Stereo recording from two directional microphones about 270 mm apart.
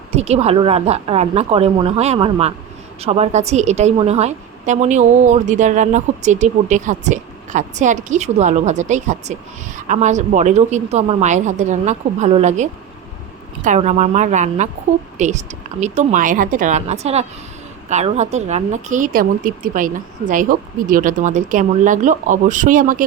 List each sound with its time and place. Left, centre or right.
0.1 s a woman's voice: right